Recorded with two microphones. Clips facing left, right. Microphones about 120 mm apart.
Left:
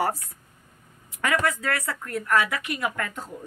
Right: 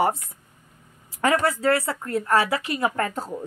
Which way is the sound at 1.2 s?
30° right (ahead or behind).